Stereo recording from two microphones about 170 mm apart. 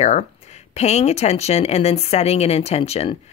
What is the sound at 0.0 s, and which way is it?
Speech, 40° left (ahead or behind).